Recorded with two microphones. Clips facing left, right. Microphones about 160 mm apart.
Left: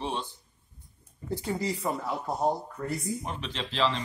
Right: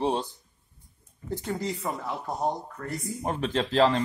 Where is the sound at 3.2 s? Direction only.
50° right (ahead or behind).